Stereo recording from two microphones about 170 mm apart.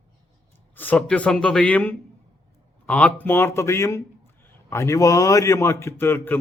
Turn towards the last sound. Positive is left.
turn(degrees=15)  # may be behind; listen again after turning